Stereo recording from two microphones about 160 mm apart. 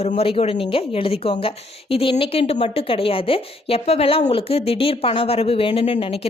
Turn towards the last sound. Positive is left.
turn(degrees=35)  # may be behind; listen again after turning